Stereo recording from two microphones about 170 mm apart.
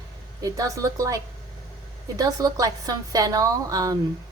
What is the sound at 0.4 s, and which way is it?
A woman's voice, 20° right (ahead or behind).